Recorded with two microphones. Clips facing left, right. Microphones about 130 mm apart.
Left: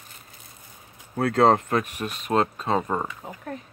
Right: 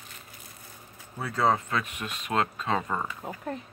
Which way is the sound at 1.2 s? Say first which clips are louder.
Left 7 dB; 70° left (ahead or behind).